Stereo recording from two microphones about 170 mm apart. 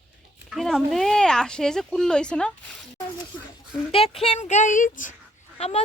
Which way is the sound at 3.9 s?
35° left (ahead or behind).